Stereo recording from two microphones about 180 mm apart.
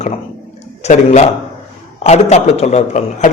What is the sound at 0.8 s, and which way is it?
A man's voice, 40° left (ahead or behind).